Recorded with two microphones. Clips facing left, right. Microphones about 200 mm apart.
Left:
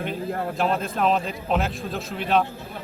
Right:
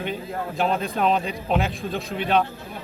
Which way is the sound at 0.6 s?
Centre (ahead or behind).